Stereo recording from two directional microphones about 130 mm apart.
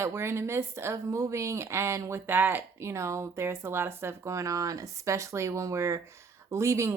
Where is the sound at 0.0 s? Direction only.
20° right (ahead or behind).